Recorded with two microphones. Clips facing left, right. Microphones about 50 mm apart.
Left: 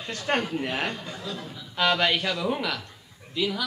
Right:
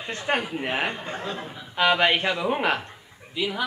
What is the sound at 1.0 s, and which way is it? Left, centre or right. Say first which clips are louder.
Speech: right 4 dB; right.